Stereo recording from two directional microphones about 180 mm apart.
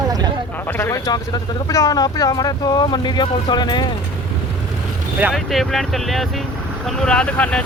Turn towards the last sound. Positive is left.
turn(degrees=5)  # may be behind; listen again after turning